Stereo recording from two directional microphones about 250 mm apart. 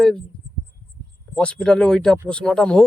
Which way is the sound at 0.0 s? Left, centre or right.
Centre.